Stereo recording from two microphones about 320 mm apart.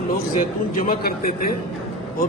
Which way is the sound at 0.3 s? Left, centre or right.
Left.